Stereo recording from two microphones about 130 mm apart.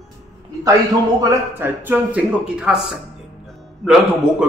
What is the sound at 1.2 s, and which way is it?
Speech, 25° right (ahead or behind).